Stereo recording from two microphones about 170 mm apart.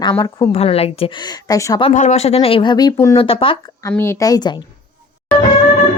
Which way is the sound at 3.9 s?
15° left (ahead or behind).